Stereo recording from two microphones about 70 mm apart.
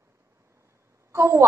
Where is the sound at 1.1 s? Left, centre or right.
Right.